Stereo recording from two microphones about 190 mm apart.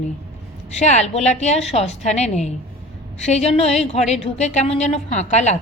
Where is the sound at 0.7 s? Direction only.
35° left (ahead or behind).